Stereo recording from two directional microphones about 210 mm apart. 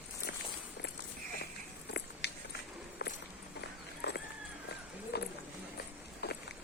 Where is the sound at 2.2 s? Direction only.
55° left (ahead or behind).